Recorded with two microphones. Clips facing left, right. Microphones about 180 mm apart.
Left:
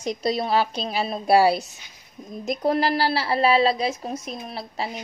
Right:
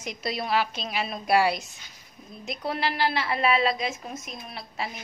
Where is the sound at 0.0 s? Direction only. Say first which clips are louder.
Left 7 dB; 30° left (ahead or behind).